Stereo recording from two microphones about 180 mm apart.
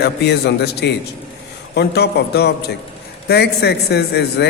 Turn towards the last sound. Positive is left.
turn(degrees=65)  # may be behind; listen again after turning